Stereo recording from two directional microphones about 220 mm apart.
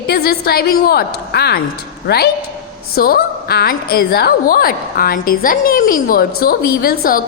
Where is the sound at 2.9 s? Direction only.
45° left (ahead or behind).